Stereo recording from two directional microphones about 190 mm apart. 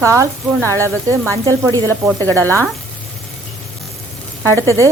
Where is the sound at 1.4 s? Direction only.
20° right (ahead or behind).